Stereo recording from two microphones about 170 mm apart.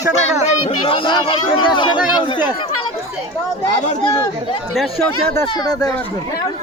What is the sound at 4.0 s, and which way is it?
Speech, 30° left (ahead or behind).